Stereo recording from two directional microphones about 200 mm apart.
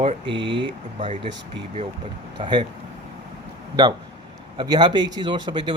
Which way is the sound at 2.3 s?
25° right (ahead or behind).